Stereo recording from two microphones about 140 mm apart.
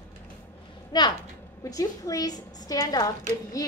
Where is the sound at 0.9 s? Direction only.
30° left (ahead or behind).